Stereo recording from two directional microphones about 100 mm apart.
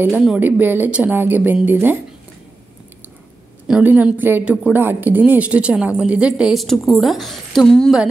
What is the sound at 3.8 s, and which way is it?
A woman's voice, 20° right (ahead or behind).